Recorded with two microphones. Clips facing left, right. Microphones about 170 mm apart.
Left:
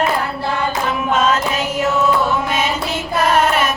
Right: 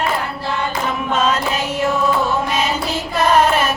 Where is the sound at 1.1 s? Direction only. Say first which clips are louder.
Left 2 dB; 30° right (ahead or behind).